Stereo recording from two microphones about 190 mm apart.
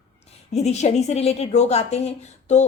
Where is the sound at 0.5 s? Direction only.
35° left (ahead or behind).